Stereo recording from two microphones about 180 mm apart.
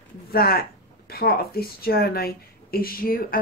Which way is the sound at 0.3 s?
55° left (ahead or behind).